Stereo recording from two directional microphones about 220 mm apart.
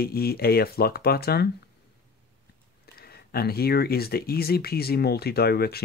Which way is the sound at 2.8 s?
45° left (ahead or behind).